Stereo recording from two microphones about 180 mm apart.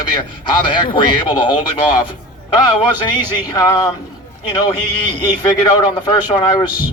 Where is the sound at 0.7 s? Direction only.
25° left (ahead or behind).